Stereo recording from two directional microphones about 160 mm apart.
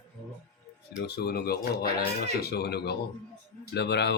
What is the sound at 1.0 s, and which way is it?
Speech, 90° left.